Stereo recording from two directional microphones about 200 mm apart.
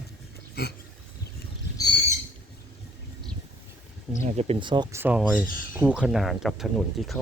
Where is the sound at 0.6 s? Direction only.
55° left (ahead or behind).